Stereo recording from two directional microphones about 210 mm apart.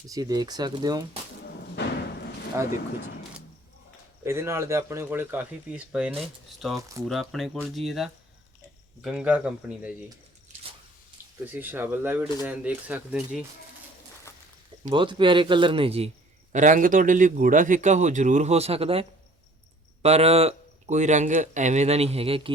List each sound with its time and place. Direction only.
0.1 s speech: 20° right (ahead or behind)
1.8 s a sound: 55° left (ahead or behind)
4.2 s speech: 15° right (ahead or behind)
6.7 s speech: 15° right (ahead or behind)
7.1 s speech: centre (ahead or behind)
11.4 s speech: 10° right (ahead or behind)
14.8 s a man's voice: 25° right (ahead or behind)